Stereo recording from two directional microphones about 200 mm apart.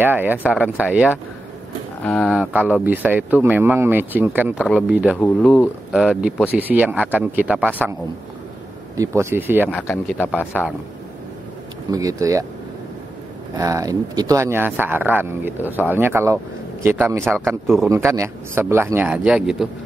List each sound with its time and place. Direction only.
0.0 s speech: 10° right (ahead or behind)
8.9 s speech: 15° right (ahead or behind)
9.7 s speech: 10° left (ahead or behind)
11.9 s speech: 15° right (ahead or behind)
13.6 s speech: 15° right (ahead or behind)